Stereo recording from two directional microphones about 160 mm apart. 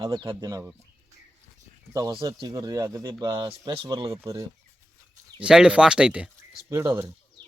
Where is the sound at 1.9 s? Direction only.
25° right (ahead or behind).